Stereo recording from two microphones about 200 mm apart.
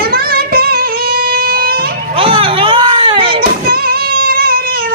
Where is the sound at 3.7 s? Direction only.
50° right (ahead or behind).